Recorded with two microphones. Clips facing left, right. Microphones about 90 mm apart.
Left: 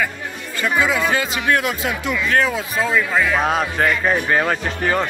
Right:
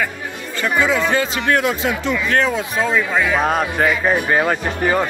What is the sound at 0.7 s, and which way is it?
A man's voice, 5° left (ahead or behind).